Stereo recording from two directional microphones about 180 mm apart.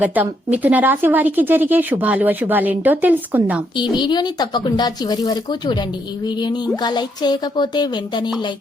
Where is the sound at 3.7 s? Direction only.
25° left (ahead or behind).